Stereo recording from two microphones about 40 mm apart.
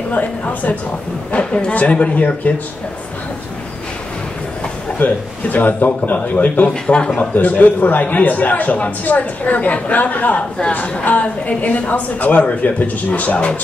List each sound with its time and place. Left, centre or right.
0.1 s speech: left
1.3 s a man's voice: left
4.9 s a man's voice: left
6.7 s a man's voice: left
7.2 s a man's voice: left